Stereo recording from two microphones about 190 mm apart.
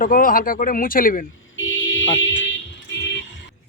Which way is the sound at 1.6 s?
90° left.